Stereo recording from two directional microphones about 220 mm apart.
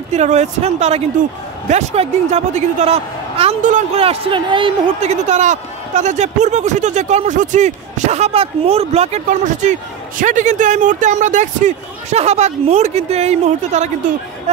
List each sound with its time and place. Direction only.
0.1 s a woman's voice: 30° right (ahead or behind)